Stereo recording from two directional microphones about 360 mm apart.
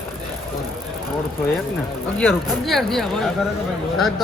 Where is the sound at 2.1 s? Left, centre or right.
Centre.